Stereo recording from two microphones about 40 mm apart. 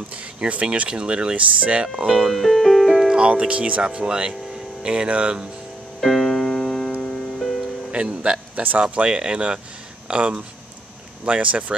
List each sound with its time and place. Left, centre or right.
0.1 s speech: right
0.8 s speech: right
2.0 s speech: centre
2.3 s music: centre
3.1 s speech: right
5.9 s music: centre
7.9 s speech: right